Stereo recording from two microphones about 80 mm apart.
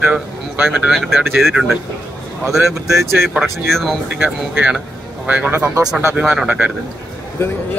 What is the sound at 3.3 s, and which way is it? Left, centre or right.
Speech, centre.